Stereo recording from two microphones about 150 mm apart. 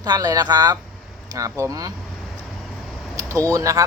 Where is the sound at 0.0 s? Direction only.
25° right (ahead or behind).